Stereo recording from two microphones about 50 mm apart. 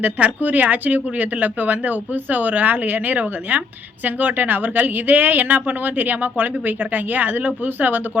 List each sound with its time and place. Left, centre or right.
0.0 s speech: right